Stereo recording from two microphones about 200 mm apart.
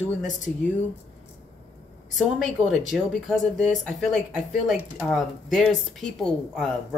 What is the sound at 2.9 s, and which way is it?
A woman's voice, centre (ahead or behind).